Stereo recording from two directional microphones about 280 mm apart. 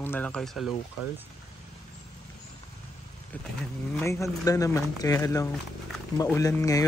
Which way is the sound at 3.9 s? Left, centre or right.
Centre.